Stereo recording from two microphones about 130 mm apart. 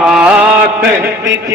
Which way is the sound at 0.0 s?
5° right (ahead or behind).